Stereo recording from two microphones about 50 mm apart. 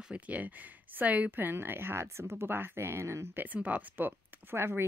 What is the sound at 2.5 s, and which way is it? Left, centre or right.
Speech, right.